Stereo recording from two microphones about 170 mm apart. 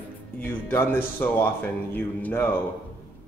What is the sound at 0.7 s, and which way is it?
Speech, 15° left (ahead or behind).